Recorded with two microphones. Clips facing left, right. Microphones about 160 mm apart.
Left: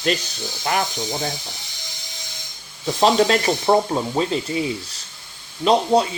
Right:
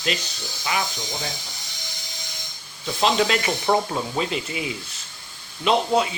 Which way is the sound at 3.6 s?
25° left (ahead or behind).